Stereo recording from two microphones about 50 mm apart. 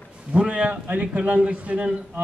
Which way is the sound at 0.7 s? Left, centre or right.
Right.